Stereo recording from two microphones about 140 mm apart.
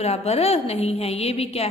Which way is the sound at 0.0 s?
50° left (ahead or behind).